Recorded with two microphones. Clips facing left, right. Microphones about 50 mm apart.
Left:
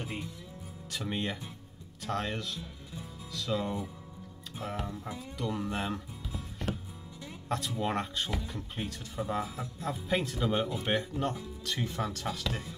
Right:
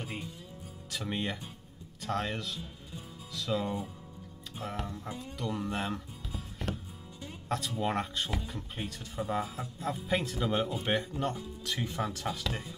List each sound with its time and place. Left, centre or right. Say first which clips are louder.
0.8 s speech: even; centre
5.4 s music: left 1 dB; centre
7.4 s speech: even; centre